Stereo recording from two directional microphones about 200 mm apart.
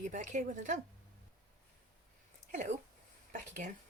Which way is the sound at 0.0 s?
40° right (ahead or behind).